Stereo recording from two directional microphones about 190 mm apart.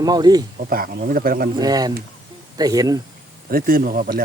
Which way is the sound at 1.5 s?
20° right (ahead or behind).